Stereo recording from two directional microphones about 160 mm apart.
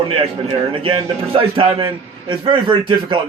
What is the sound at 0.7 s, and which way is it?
Speech, 35° right (ahead or behind).